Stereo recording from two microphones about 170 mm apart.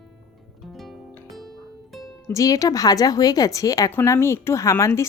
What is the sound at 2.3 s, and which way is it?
A woman's voice, 20° left (ahead or behind).